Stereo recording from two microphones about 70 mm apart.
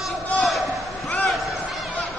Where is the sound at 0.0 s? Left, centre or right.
Centre.